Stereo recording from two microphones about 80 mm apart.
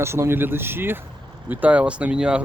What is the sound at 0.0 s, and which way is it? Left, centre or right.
Speech, right.